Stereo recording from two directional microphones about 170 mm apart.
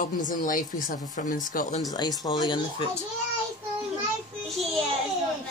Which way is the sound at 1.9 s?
25° left (ahead or behind).